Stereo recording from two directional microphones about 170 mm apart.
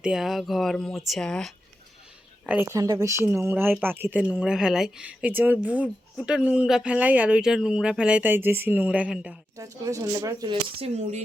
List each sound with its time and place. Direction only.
0.0 s speech: 5° right (ahead or behind)
2.5 s speech: 15° right (ahead or behind)
9.6 s speech: 20° right (ahead or behind); by 11.2 s 40° right (ahead or behind)